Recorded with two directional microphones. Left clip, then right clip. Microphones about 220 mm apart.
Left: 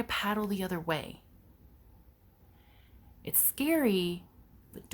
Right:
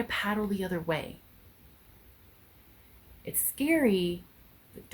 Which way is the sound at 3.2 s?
45° left (ahead or behind).